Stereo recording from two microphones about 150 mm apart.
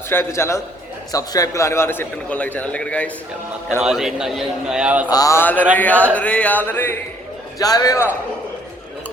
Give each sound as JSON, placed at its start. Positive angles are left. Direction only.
{"t": 0.1, "sound": "a man's voice", "side_deg": 15}
{"t": 3.8, "sound": "a man's voice", "side_deg": -5}
{"t": 5.0, "sound": "a man's voice", "side_deg": 25}
{"t": 7.6, "sound": "speech", "side_deg": 25}